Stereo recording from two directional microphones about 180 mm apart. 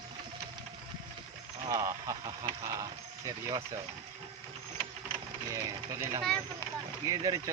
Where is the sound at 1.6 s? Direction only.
20° right (ahead or behind).